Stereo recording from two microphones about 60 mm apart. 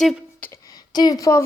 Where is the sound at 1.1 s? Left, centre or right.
Left.